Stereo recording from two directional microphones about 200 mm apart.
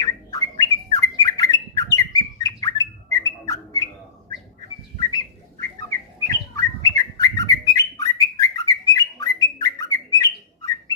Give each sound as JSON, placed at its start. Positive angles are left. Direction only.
{"t": 0.0, "sound": "bird", "side_deg": 20}
{"t": 4.9, "sound": "bird", "side_deg": 20}